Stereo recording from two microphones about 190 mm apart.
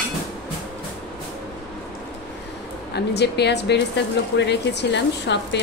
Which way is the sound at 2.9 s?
60° left (ahead or behind).